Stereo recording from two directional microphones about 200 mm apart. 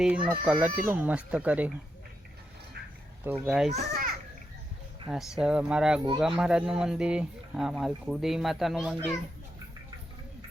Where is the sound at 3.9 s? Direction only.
45° right (ahead or behind).